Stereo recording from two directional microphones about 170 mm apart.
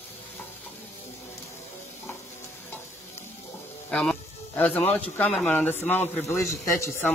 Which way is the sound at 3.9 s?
5° left (ahead or behind).